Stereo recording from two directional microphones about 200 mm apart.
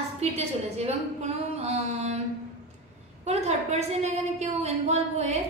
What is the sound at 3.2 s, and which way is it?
A woman's voice, 35° right (ahead or behind).